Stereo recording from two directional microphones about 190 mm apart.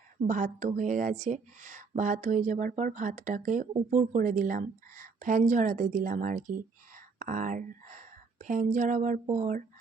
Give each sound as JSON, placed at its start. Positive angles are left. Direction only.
{"t": 0.2, "sound": "a woman's voice", "side_deg": -45}